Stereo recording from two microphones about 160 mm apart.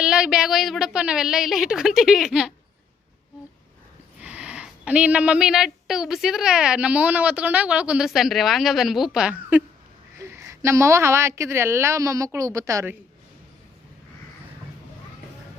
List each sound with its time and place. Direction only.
0.0 s speech: 5° right (ahead or behind)
4.2 s a woman's voice: 10° right (ahead or behind)